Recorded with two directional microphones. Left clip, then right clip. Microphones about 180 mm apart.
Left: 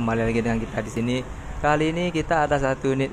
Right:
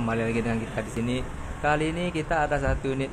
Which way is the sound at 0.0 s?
25° left (ahead or behind).